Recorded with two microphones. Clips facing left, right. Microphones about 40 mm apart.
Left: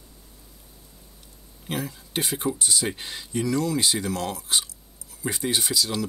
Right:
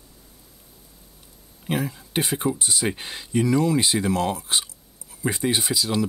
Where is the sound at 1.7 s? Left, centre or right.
Centre.